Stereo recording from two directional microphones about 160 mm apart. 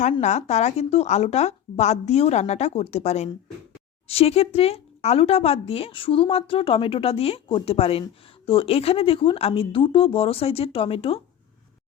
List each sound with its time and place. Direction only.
0.0 s speech: 45° left (ahead or behind)